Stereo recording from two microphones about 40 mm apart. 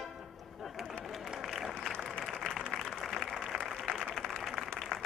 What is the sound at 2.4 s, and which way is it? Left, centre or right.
Applause, left.